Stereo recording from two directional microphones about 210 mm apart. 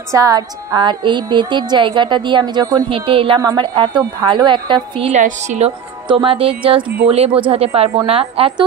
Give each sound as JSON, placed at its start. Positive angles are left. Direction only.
{"t": 0.1, "sound": "a woman's voice", "side_deg": -15}